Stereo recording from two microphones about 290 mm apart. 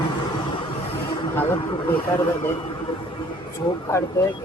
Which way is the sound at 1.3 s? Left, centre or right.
Centre.